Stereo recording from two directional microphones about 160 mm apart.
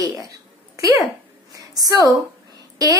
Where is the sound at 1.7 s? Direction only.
25° right (ahead or behind).